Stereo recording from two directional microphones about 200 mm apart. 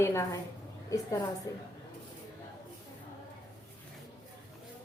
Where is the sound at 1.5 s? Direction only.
15° left (ahead or behind).